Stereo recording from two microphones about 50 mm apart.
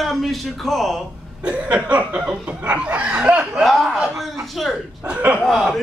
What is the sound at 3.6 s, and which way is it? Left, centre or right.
A man's voice, centre.